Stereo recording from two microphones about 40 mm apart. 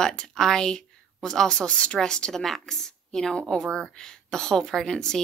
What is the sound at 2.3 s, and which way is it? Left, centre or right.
A woman's voice, centre.